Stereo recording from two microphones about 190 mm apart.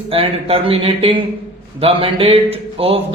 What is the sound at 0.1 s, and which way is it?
Speech, 30° right (ahead or behind).